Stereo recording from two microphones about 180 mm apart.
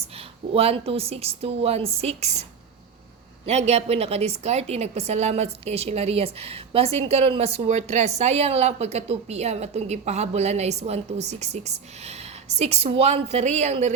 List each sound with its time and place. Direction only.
0.0 s a woman's voice: 35° right (ahead or behind)